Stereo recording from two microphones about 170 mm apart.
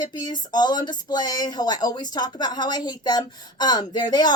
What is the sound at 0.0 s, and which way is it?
Speech, 25° left (ahead or behind).